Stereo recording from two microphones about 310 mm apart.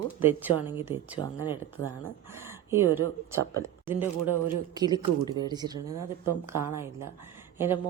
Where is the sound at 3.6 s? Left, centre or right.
Centre.